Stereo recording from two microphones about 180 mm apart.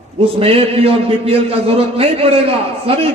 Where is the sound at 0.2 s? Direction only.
30° right (ahead or behind).